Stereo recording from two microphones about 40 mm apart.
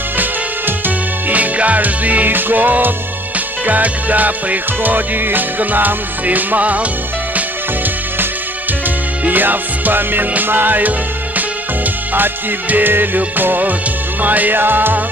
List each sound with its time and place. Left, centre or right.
0.2 s music: right
2.3 s music: right
9.2 s music: right
14.6 s music: right